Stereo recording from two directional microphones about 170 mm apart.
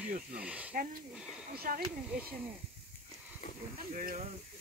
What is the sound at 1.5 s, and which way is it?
Speech, 60° right (ahead or behind).